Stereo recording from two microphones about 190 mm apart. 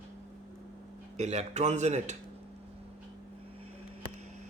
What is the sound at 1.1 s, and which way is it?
Speech, 35° right (ahead or behind).